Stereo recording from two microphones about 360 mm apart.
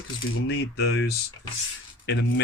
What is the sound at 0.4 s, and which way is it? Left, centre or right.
Speech, left.